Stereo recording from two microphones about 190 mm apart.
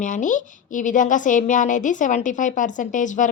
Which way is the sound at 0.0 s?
40° left (ahead or behind).